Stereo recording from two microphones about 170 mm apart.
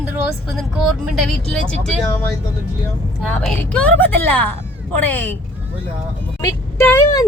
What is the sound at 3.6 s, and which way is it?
Speech, 10° left (ahead or behind).